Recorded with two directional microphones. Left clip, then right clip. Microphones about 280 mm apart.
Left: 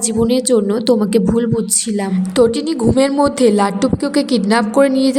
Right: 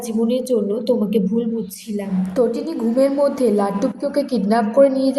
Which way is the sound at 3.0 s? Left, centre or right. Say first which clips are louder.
Left 2 dB; left.